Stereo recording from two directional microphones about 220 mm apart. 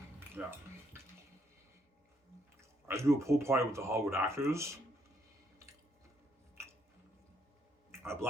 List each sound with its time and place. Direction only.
0.4 s speech: 5° right (ahead or behind)
2.6 s speech: 10° right (ahead or behind)
7.9 s a sound: 10° right (ahead or behind)